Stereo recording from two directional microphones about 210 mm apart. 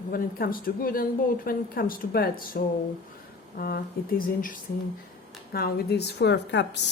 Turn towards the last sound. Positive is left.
turn(degrees=55)  # may be behind; listen again after turning